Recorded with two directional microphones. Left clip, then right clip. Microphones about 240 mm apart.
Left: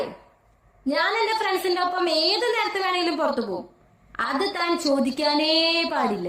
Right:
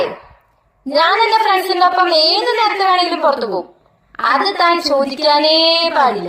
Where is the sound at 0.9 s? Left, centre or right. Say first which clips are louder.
Right 11 dB; right.